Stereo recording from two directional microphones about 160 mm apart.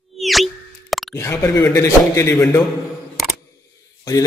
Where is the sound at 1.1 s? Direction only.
15° left (ahead or behind).